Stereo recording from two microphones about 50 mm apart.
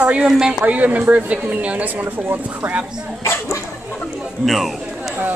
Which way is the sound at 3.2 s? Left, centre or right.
Left.